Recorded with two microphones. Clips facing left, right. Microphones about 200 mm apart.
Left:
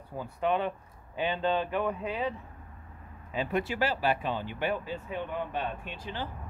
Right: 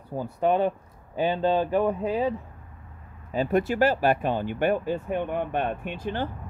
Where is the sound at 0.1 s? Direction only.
40° right (ahead or behind).